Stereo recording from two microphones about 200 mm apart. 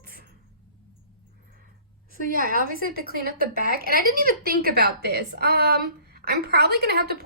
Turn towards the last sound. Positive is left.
turn(degrees=-50)  # may be behind; listen again after turning